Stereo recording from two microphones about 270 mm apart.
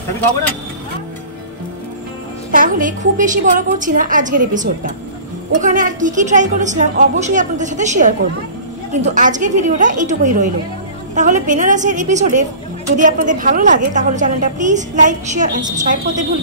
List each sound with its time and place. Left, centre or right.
2.5 s a woman's voice: right